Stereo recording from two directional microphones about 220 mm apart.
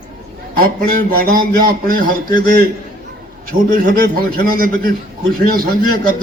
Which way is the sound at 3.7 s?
40° right (ahead or behind).